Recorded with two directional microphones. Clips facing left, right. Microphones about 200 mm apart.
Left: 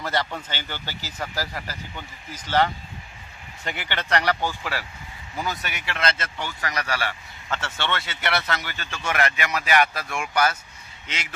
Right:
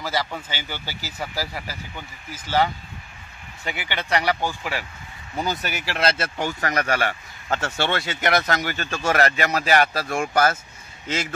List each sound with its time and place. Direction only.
0.0 s speech: 5° right (ahead or behind)
5.3 s speech: 30° right (ahead or behind); by 10.6 s 50° right (ahead or behind)